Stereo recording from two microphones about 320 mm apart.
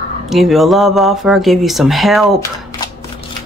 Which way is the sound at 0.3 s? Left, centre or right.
Centre.